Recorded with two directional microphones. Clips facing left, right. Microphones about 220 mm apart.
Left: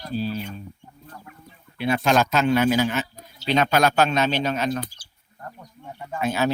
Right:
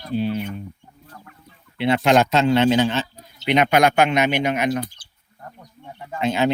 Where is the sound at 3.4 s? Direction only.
20° right (ahead or behind).